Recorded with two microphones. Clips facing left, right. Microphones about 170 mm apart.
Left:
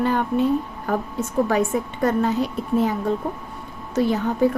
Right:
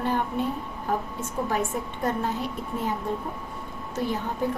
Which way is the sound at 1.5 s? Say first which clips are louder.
Left 6 dB; 90° left.